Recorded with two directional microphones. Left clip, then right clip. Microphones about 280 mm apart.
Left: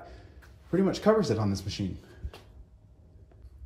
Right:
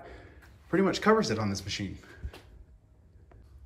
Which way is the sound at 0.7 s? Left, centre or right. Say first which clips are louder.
Even; centre.